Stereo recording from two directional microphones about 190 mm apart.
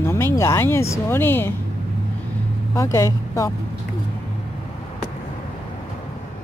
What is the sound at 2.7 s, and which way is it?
Speech, 15° left (ahead or behind).